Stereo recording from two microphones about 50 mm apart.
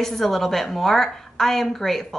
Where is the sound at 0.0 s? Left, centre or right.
Centre.